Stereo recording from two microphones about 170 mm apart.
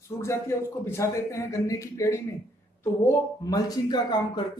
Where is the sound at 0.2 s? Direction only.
15° left (ahead or behind).